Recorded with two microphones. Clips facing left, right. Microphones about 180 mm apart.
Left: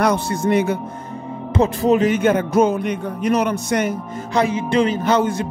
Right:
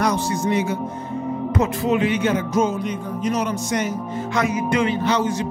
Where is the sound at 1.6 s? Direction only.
35° left (ahead or behind); by 3.9 s 60° left (ahead or behind).